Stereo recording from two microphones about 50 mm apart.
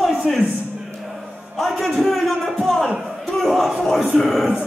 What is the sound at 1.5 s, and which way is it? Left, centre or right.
A man's voice, centre.